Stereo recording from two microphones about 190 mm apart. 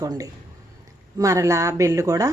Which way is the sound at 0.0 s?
20° right (ahead or behind).